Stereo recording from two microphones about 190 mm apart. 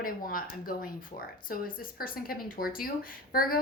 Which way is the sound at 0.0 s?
50° left (ahead or behind).